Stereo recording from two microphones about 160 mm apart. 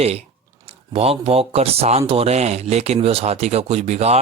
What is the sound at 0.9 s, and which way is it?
Speech, 35° right (ahead or behind).